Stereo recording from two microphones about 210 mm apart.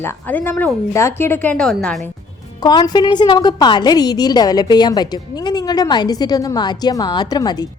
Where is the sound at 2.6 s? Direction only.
20° left (ahead or behind).